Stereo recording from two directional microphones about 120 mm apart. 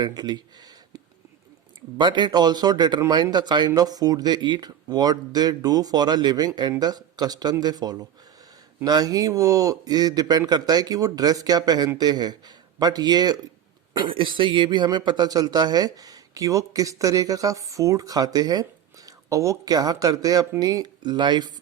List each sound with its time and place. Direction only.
0.0 s speech: 35° right (ahead or behind)
2.0 s speech: 40° right (ahead or behind)